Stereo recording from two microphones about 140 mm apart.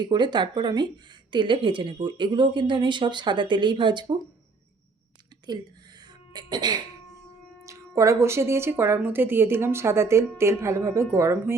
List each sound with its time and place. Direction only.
0.0 s a woman's voice: 30° right (ahead or behind)
6.3 s a woman's voice: 30° right (ahead or behind)